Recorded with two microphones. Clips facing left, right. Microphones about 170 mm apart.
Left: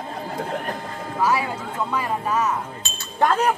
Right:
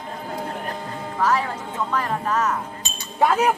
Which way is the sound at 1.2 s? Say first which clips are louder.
Even; 10° left (ahead or behind).